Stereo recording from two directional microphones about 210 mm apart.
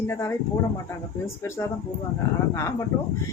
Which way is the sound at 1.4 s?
15° left (ahead or behind).